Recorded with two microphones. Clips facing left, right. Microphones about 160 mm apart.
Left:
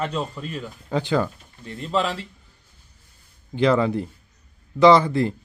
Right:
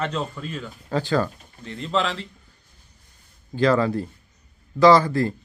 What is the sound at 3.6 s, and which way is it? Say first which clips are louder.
Speech: even; 20° left (ahead or behind).